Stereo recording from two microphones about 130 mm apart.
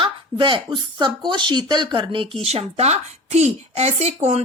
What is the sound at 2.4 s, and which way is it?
Speech, 55° right (ahead or behind).